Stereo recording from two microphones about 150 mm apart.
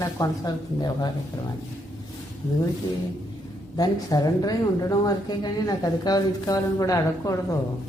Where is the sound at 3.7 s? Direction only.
25° left (ahead or behind).